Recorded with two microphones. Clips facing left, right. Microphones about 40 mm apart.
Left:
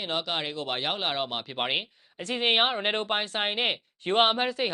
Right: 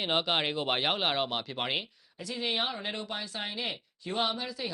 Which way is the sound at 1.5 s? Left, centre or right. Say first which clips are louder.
Left 5 dB; centre.